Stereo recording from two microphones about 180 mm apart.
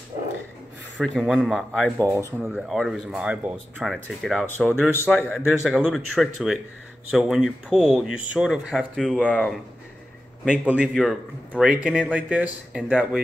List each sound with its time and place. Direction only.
1.0 s speech: centre (ahead or behind)
2.0 s a man's voice: 15° right (ahead or behind)
2.4 s a man's voice: centre (ahead or behind)